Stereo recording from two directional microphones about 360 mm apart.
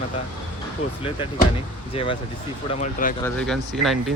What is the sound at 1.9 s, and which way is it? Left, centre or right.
Speech, centre.